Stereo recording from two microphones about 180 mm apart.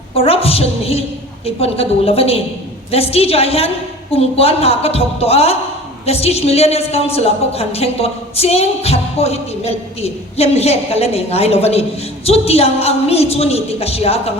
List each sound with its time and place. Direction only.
0.2 s a woman's voice: 30° left (ahead or behind)